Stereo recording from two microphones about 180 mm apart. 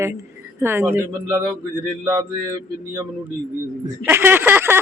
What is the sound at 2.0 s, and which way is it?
Speech, 15° right (ahead or behind).